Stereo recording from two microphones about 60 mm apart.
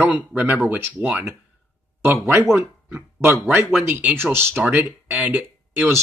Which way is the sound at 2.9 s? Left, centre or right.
Right.